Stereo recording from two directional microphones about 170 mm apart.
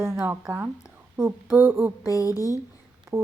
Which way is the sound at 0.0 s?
15° right (ahead or behind).